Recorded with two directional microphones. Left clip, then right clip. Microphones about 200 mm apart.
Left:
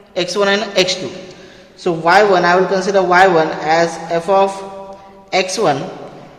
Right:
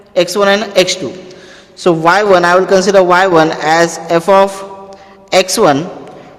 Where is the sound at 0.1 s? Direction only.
40° right (ahead or behind).